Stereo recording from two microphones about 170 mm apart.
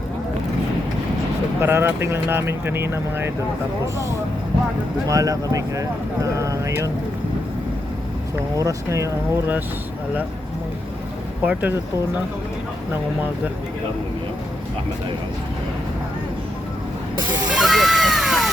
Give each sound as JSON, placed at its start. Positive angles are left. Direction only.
{"t": 1.6, "sound": "speech", "side_deg": -15}
{"t": 5.0, "sound": "speech", "side_deg": -20}
{"t": 8.5, "sound": "speech", "side_deg": -20}
{"t": 11.4, "sound": "speech", "side_deg": -10}
{"t": 17.5, "sound": "a sound", "side_deg": 0}